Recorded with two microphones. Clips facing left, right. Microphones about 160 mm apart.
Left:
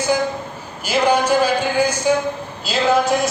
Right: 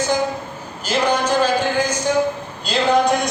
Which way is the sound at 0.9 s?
10° left (ahead or behind).